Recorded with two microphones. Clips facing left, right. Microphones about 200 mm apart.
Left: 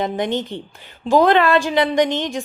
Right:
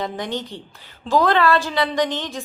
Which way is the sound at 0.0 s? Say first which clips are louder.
Left 5 dB; 20° left (ahead or behind).